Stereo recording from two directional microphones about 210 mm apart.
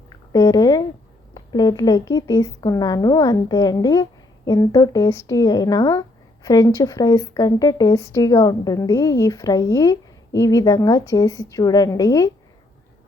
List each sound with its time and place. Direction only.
0.3 s a woman's voice: 20° left (ahead or behind)